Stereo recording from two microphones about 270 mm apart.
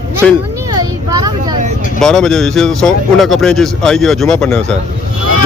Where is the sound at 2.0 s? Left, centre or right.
Centre.